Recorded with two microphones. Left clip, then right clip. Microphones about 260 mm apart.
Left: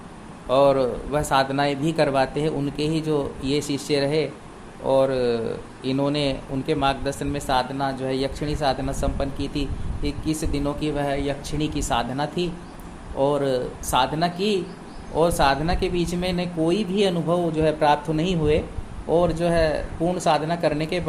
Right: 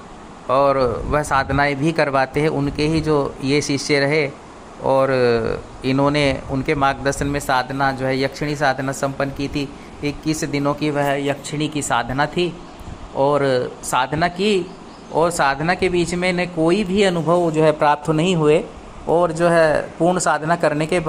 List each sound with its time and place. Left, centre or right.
0.4 s speech: centre
2.7 s speech: right
3.6 s speech: centre
9.4 s speech: right
10.2 s speech: centre